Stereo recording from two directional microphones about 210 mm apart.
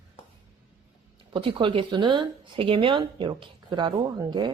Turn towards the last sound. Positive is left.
turn(degrees=-20)  # may be behind; listen again after turning